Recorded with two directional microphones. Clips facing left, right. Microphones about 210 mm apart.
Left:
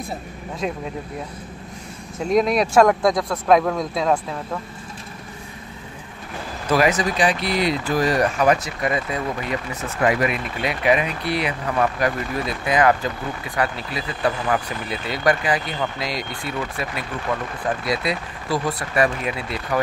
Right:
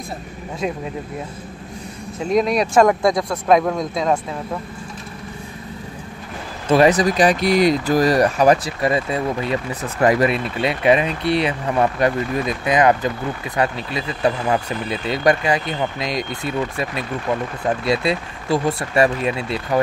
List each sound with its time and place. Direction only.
2.1 s speech: centre (ahead or behind)
6.7 s speech: 30° right (ahead or behind)
10.0 s speech: 30° right (ahead or behind)
17.8 s speech: 25° right (ahead or behind)